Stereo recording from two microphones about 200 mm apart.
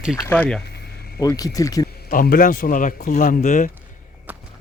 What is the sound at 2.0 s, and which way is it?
A man's voice, 45° left (ahead or behind).